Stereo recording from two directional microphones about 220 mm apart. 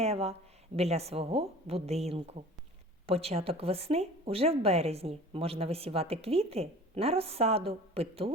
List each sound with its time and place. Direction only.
0.0 s speech: 25° right (ahead or behind)